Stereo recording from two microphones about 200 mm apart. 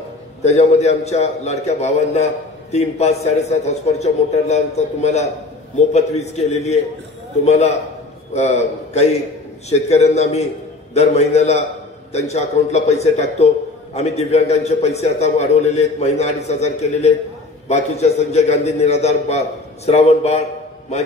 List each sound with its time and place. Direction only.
0.4 s a man's voice: 35° left (ahead or behind)